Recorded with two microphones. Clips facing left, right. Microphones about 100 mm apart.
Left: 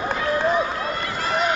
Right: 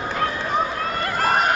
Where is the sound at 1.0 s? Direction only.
50° right (ahead or behind).